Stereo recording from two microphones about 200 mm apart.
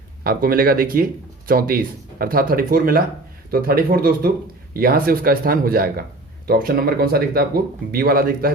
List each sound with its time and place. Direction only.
0.3 s speech: 45° right (ahead or behind)